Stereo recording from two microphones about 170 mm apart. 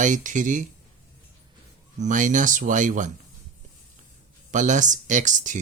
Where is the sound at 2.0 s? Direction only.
50° right (ahead or behind).